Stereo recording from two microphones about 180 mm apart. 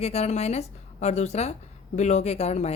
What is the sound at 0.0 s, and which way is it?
Speech, 35° left (ahead or behind).